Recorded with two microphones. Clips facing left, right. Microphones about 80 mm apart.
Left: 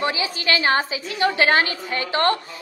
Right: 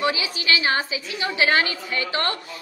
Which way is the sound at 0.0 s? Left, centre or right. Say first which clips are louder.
Even; left.